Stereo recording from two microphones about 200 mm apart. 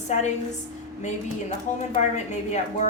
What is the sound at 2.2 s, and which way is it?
Speech, 35° left (ahead or behind).